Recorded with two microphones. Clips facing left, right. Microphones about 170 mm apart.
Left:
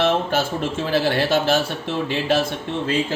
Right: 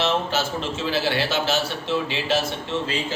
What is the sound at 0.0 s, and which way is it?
A man's voice, 55° left (ahead or behind).